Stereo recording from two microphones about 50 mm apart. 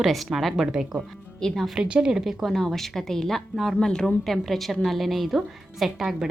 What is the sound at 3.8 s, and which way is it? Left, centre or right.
Speech, centre.